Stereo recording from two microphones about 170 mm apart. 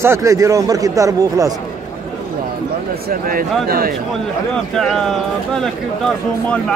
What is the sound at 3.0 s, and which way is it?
Speech, 60° right (ahead or behind).